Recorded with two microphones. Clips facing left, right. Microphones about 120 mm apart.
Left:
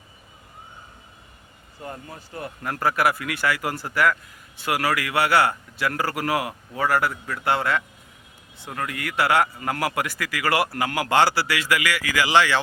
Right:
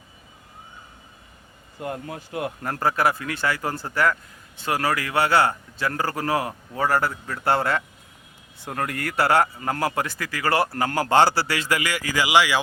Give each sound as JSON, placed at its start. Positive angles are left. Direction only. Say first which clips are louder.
{"t": 1.8, "sound": "speech", "louder": "right 5 dB", "side_deg": -65}
{"t": 2.6, "sound": "a man's voice", "louder": "left 1 dB", "side_deg": -25}